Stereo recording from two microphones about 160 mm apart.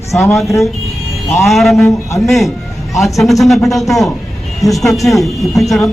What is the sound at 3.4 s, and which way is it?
A man's voice, centre (ahead or behind).